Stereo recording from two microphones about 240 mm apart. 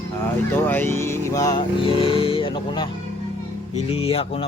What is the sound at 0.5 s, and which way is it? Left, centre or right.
Music, centre.